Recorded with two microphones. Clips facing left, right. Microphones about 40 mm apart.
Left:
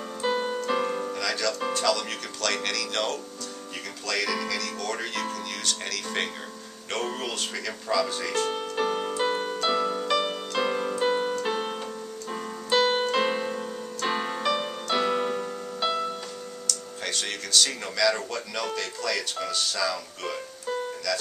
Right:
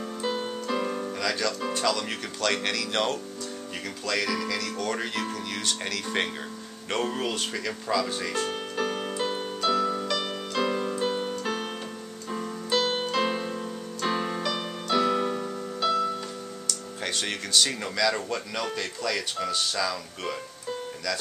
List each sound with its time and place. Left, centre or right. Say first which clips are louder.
0.2 s keyboard: left 4 dB; centre
0.7 s piano: left 2 dB; centre
1.1 s music: even; centre
1.7 s speech: left 1 dB; centre
4.1 s speech: even; centre
8.5 s music: left 2 dB; centre
12.3 s keyboard: left 1 dB; centre
16.6 s speech: even; centre